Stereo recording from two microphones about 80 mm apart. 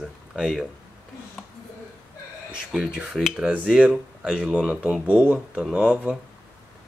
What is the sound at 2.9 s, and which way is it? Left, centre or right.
Speech, centre.